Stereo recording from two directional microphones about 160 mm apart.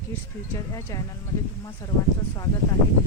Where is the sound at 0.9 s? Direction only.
20° left (ahead or behind).